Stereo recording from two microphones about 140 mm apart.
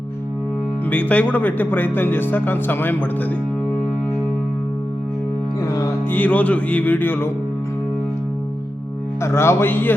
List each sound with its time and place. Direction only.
0.9 s speech: 10° left (ahead or behind)
5.6 s music: 25° left (ahead or behind)
6.1 s speech: 10° left (ahead or behind)
9.2 s speech: 20° left (ahead or behind)